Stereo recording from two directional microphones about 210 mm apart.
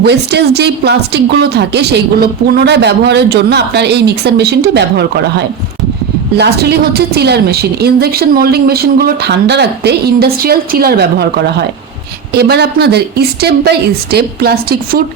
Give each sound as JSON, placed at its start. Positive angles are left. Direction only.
{"t": 0.0, "sound": "speech", "side_deg": -50}